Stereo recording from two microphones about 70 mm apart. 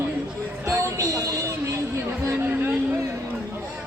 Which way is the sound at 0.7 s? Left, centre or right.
Right.